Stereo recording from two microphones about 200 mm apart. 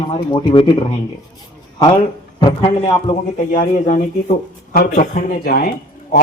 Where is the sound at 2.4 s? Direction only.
30° left (ahead or behind).